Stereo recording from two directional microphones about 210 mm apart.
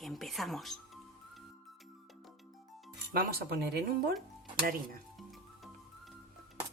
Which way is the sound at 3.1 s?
45° right (ahead or behind).